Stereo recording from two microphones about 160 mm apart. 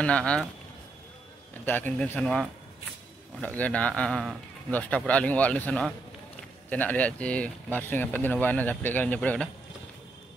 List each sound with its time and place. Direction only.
0.0 s speech: 5° left (ahead or behind)
1.7 s speech: 10° left (ahead or behind)